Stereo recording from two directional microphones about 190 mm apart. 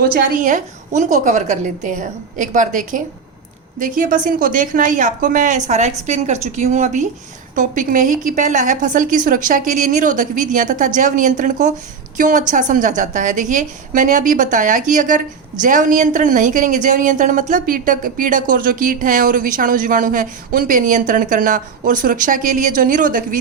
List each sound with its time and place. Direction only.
0.0 s a woman's voice: 50° right (ahead or behind)